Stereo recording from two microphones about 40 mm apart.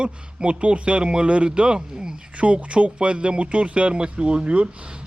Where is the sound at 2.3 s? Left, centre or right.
Right.